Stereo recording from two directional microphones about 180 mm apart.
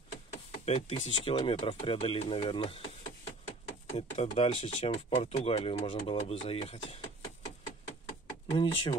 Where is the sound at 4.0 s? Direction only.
35° left (ahead or behind).